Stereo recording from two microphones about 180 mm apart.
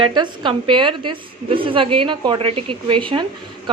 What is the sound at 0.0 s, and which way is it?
A woman's voice, 25° right (ahead or behind).